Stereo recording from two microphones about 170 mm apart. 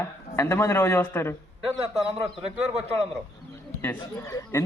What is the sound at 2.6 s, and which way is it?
Speech, 40° right (ahead or behind).